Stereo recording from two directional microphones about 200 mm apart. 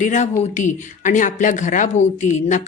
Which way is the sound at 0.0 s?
35° left (ahead or behind).